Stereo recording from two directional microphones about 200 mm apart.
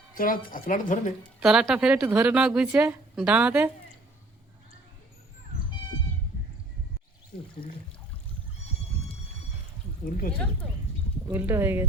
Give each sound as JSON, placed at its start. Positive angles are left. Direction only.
{"t": 0.1, "sound": "speech", "side_deg": 45}
{"t": 1.4, "sound": "a woman's voice", "side_deg": -5}
{"t": 7.3, "sound": "speech", "side_deg": 50}
{"t": 11.3, "sound": "speech", "side_deg": -10}